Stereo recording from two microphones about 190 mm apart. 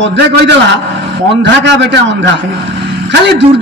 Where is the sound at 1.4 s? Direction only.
65° right (ahead or behind).